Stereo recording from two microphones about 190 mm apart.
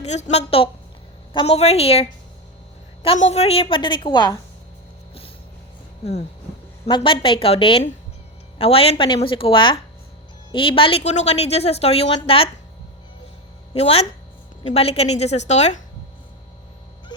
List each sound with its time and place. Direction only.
0.0 s a woman's voice: 35° left (ahead or behind)
6.8 s a woman's voice: 25° left (ahead or behind)
13.7 s speech: 30° left (ahead or behind)
17.1 s dog: 25° left (ahead or behind)